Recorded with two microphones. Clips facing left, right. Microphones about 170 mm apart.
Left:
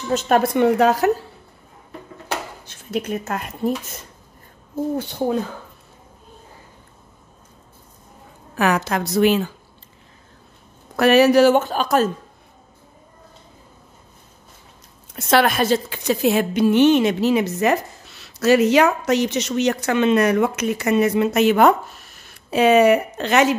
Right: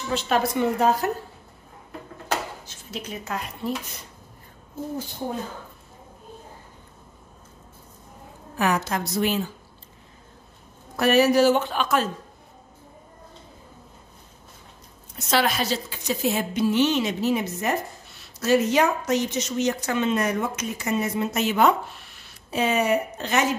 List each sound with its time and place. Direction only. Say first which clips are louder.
0.1 s a woman's voice: left 6 dB; 45° left (ahead or behind); by 1.1 s 80° left
2.6 s speech: left 10 dB; 55° left (ahead or behind)
8.5 s a woman's voice: left 4 dB; 75° left (ahead or behind)
11.0 s a woman's voice: left 5 dB; 80° left
11.5 s a woman's voice: left 5 dB; 40° left (ahead or behind)
15.1 s a woman's voice: left 6 dB; 55° left (ahead or behind)
22.5 s a woman's voice: left 8 dB; 75° left (ahead or behind)